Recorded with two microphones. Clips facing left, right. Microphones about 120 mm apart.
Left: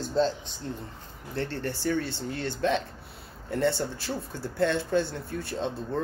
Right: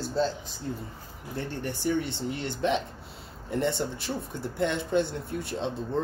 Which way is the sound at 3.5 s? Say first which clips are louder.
Left 1 dB; 20° right (ahead or behind).